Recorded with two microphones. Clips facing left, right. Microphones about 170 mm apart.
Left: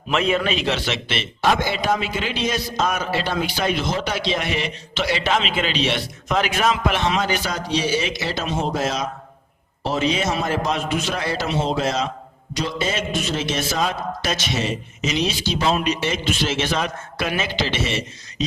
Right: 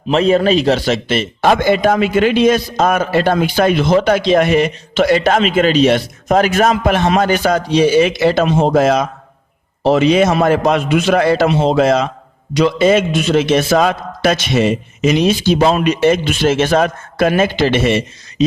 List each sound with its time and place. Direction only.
0.1 s a man's voice: 35° right (ahead or behind); by 18.4 s 55° right (ahead or behind)